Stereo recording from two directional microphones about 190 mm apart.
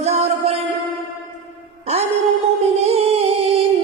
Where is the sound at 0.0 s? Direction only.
35° right (ahead or behind).